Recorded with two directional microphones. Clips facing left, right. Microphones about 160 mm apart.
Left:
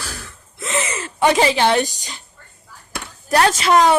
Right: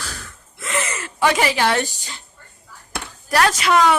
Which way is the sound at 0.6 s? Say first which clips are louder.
Left 2 dB; 20° left (ahead or behind).